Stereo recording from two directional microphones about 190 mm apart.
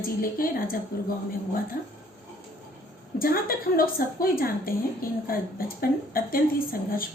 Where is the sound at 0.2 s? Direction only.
50° left (ahead or behind).